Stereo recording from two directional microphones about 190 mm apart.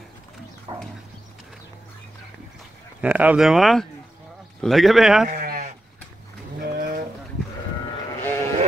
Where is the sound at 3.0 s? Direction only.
5° right (ahead or behind).